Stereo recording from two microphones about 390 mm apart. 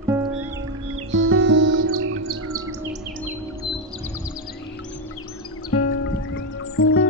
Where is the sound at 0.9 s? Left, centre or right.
Right.